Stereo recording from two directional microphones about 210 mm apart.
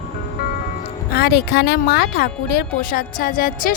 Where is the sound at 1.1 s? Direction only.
50° left (ahead or behind).